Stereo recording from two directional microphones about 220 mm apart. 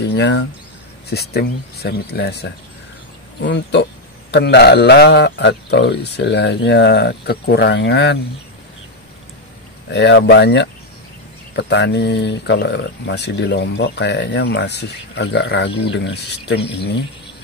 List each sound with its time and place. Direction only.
0.0 s a sound: 50° left (ahead or behind)
1.1 s speech: 45° left (ahead or behind)
9.8 s speech: 50° left (ahead or behind)